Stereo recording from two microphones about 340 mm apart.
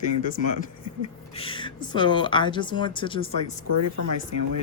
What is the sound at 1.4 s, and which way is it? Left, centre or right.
Speech, centre.